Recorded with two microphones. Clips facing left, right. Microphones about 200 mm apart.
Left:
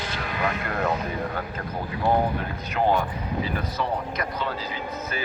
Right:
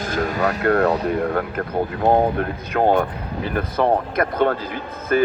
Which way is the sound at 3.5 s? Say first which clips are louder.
Right 9 dB; 55° right (ahead or behind).